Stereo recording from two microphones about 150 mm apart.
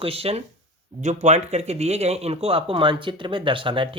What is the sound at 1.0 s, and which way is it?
Speech, 50° right (ahead or behind).